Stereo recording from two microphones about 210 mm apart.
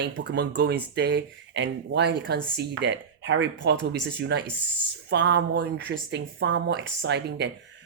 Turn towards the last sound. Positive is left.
turn(degrees=-55)  # may be behind; listen again after turning